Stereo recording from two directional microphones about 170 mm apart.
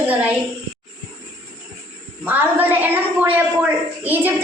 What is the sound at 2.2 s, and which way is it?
A woman's voice, 10° right (ahead or behind).